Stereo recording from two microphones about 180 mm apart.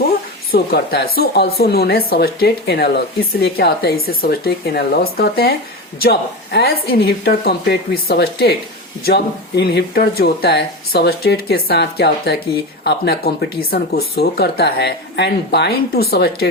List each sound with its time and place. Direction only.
0.5 s speech: 60° left (ahead or behind)